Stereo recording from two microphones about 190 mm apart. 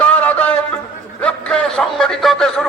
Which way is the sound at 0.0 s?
10° left (ahead or behind).